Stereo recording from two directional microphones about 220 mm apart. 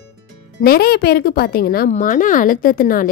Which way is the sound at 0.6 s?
45° left (ahead or behind).